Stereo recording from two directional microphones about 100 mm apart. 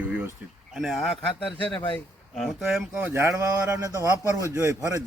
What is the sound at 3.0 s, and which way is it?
A man's voice, 25° right (ahead or behind).